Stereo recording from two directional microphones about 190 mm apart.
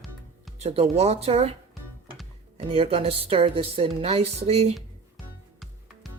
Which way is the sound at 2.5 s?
30° right (ahead or behind).